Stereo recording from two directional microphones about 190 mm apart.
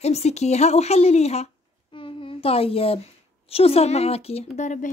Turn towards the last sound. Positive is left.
turn(degrees=40)  # may be behind; listen again after turning